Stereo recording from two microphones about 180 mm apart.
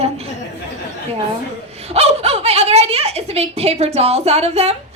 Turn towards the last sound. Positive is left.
turn(degrees=-35)  # may be behind; listen again after turning